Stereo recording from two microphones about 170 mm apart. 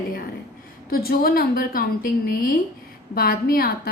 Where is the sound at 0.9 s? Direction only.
60° left (ahead or behind).